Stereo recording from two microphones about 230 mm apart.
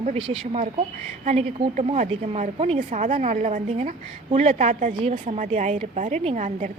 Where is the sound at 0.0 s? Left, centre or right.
Right.